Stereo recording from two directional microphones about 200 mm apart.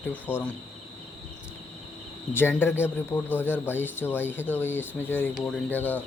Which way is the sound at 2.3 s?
10° left (ahead or behind).